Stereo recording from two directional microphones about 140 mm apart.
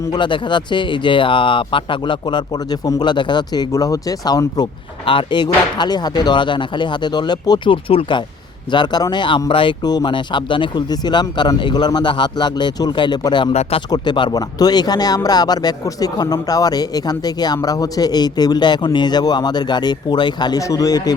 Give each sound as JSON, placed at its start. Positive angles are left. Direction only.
{"t": 0.1, "sound": "speech", "side_deg": 35}
{"t": 13.5, "sound": "speech", "side_deg": 45}
{"t": 13.9, "sound": "speech", "side_deg": 30}